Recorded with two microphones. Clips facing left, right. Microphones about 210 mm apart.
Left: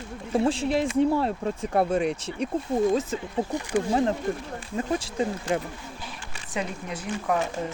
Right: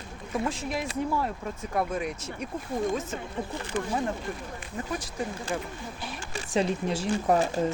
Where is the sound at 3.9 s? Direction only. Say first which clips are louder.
Left 7 dB; 30° left (ahead or behind).